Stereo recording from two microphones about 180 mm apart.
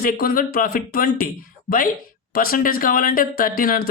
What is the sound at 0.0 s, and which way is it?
Speech, 55° left (ahead or behind).